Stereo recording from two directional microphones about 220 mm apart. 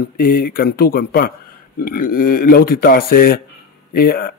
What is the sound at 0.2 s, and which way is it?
A man's voice, 40° left (ahead or behind).